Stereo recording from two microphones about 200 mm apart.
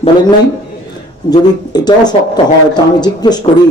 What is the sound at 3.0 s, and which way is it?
Speech, 20° left (ahead or behind).